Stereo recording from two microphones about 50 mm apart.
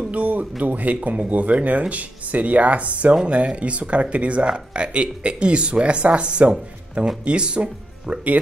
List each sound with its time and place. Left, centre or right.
0.1 s speech: right